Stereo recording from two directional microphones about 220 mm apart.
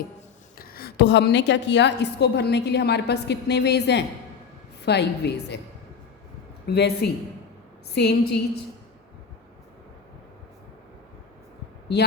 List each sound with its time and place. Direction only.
0.6 s a woman's voice: 45° left (ahead or behind)
6.7 s a woman's voice: 50° left (ahead or behind)